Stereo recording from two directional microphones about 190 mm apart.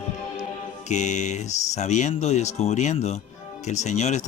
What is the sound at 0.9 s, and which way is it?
A man's voice, 40° left (ahead or behind).